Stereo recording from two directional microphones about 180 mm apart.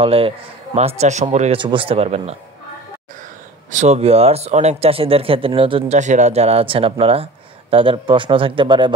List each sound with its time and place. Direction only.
0.0 s speech: 30° right (ahead or behind)
1.6 s speech: 30° right (ahead or behind)
3.7 s a man's voice: 40° right (ahead or behind)